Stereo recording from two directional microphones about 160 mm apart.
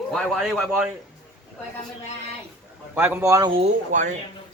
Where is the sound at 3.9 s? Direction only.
50° right (ahead or behind).